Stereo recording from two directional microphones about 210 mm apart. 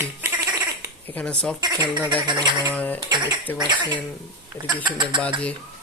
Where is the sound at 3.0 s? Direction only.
20° right (ahead or behind).